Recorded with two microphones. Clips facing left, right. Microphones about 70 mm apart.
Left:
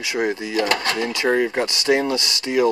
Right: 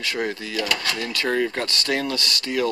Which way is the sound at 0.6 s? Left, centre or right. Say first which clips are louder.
Left 5 dB; left.